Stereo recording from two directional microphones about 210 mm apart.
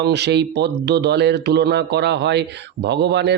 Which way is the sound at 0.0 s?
55° right (ahead or behind).